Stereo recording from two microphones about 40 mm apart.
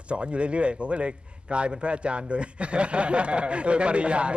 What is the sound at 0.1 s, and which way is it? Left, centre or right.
A man's voice, right.